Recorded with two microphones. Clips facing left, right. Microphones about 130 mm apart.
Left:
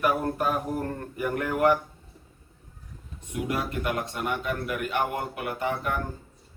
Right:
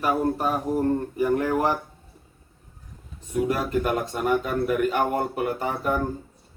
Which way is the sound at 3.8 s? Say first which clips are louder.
Right 4 dB; 40° right (ahead or behind).